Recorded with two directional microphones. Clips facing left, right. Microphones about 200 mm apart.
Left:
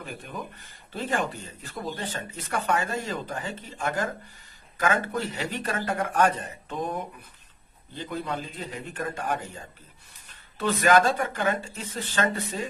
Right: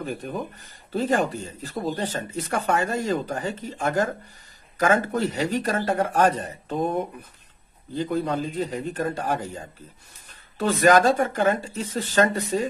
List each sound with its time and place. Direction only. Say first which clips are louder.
0.0 s speech: right 7 dB; 40° right (ahead or behind)
7.9 s speech: right 7 dB; 45° right (ahead or behind)